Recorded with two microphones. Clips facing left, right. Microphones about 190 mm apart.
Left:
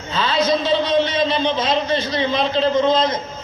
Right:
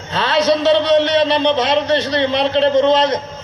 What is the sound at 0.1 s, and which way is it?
A man's voice, 70° right (ahead or behind).